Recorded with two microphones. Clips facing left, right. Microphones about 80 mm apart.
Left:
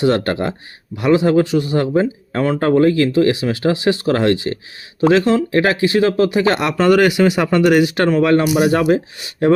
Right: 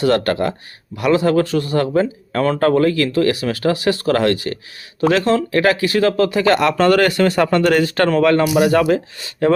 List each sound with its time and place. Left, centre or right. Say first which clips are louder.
0.0 s speech: even; left